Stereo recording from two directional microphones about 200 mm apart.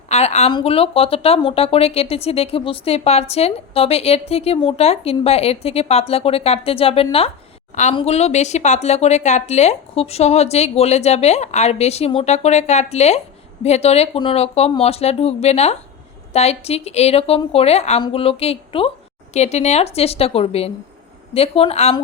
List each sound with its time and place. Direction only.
0.1 s speech: 35° left (ahead or behind)